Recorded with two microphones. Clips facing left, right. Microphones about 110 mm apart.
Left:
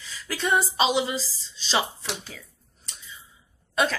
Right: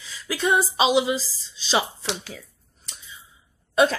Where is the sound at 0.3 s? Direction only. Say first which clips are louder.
Right 3 dB; 10° right (ahead or behind).